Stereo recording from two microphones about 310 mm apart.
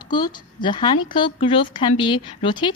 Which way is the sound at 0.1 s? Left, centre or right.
Centre.